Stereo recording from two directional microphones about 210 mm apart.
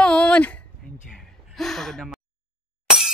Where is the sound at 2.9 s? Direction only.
5° right (ahead or behind).